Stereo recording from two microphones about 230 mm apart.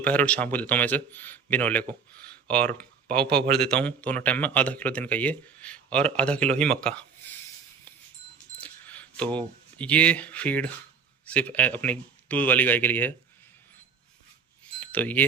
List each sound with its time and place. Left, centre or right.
0.0 s a man's voice: centre
3.2 s speech: right
3.7 s speech: centre
8.6 s a man's voice: centre
14.8 s wind chime: centre